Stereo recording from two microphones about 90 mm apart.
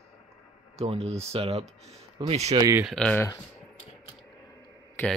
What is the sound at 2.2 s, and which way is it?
Speech, 50° right (ahead or behind).